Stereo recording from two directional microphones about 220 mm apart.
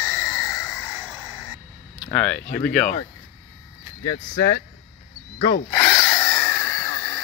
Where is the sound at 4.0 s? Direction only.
45° left (ahead or behind).